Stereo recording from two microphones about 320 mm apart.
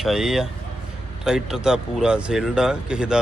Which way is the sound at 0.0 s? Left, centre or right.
Centre.